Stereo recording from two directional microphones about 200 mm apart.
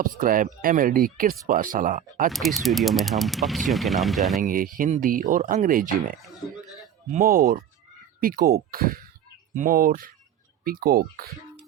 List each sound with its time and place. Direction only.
0.0 s speech: 45° right (ahead or behind)
2.3 s speech: centre (ahead or behind)
4.4 s speech: 45° right (ahead or behind)